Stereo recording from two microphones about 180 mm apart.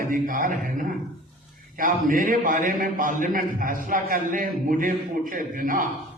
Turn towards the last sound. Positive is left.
turn(degrees=-50)  # may be behind; listen again after turning